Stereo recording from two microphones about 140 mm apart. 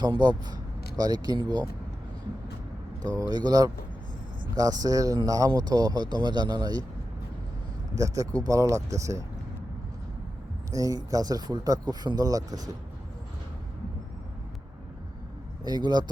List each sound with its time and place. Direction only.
0.0 s speech: 30° right (ahead or behind)
3.0 s speech: 30° right (ahead or behind)
7.9 s speech: 25° right (ahead or behind)
10.7 s speech: 25° right (ahead or behind)
15.6 s speech: 30° right (ahead or behind)